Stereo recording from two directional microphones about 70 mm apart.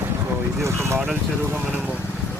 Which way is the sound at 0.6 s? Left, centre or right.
Right.